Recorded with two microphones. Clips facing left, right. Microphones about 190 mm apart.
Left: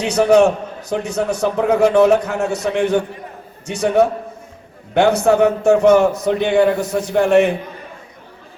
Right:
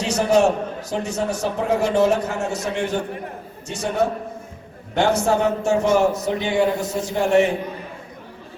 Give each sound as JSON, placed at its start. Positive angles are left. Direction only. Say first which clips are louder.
{"t": 0.0, "sound": "a man's voice", "louder": "left 5 dB", "side_deg": 60}